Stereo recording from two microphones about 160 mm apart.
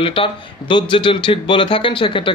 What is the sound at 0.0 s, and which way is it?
Speech, 35° left (ahead or behind).